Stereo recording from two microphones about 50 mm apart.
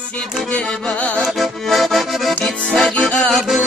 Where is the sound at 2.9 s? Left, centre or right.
Left.